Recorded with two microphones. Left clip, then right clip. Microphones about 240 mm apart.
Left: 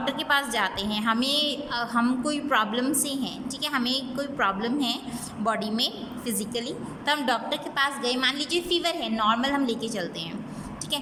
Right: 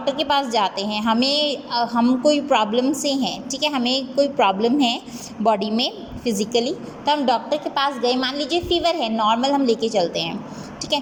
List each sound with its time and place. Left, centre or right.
0.0 s a woman's voice: centre